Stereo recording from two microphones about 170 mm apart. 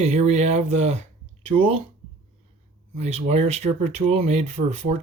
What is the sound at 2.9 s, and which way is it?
Speech, 40° right (ahead or behind).